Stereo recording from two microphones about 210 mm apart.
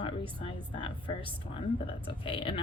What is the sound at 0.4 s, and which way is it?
Speech, 25° left (ahead or behind).